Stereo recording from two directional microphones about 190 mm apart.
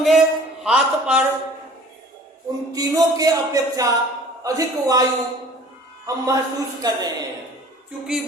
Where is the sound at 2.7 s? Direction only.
20° right (ahead or behind).